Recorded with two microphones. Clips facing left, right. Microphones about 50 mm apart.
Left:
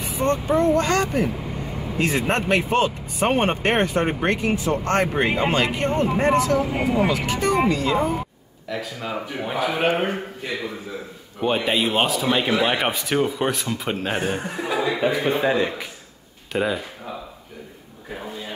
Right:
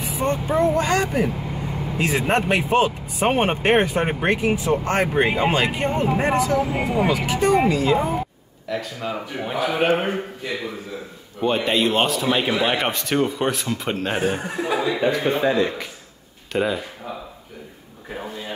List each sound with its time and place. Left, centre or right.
0.0 s speech: centre
11.4 s speech: centre
16.5 s speech: centre